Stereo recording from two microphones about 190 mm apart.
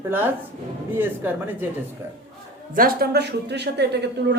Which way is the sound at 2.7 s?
50° right (ahead or behind).